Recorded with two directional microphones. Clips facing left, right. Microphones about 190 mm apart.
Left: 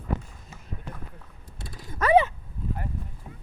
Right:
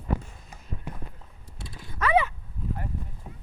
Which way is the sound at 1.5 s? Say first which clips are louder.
Left 2 dB; 45° left (ahead or behind).